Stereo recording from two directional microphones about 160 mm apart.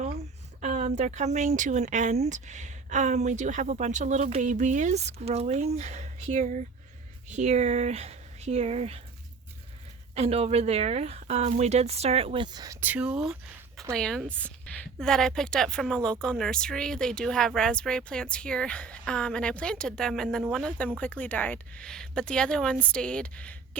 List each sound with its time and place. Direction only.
0.6 s speech: 45° right (ahead or behind)
10.2 s speech: 40° right (ahead or behind); by 23.6 s 10° left (ahead or behind)